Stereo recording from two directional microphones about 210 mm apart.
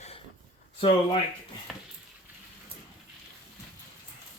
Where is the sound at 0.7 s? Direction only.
30° left (ahead or behind).